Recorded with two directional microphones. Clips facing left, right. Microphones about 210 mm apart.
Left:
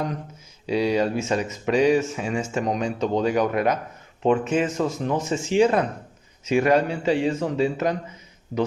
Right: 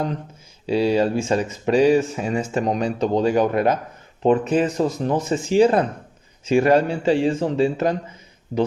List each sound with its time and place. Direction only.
0.7 s speech: 30° right (ahead or behind)